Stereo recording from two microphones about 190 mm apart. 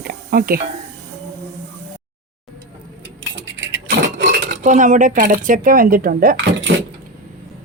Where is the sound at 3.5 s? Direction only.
70° right (ahead or behind).